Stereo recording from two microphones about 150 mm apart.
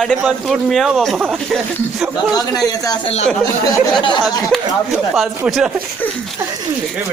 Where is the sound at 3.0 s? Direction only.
40° left (ahead or behind).